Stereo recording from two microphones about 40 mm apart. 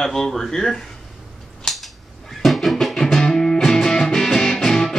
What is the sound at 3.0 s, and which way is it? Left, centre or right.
Music, centre.